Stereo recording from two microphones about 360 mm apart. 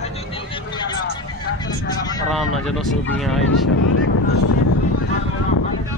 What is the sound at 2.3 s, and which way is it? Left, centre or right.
Speech, centre.